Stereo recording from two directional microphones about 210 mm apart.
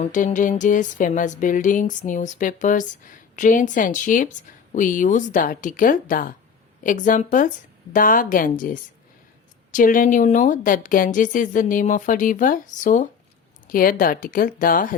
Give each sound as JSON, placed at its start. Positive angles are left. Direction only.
{"t": 0.0, "sound": "music", "side_deg": 35}